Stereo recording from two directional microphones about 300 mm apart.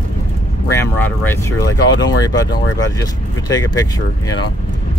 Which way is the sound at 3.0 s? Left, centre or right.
Centre.